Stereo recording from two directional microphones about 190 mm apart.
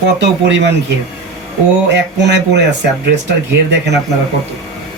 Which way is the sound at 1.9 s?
65° right (ahead or behind).